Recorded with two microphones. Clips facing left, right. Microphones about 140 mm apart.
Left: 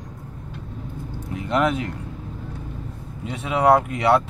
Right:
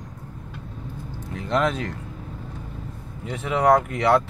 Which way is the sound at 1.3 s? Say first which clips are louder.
Left 2 dB; 10° left (ahead or behind).